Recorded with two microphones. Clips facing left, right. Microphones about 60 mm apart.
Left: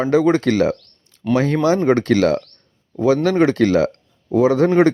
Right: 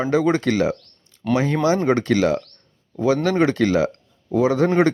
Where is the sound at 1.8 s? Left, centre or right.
Left.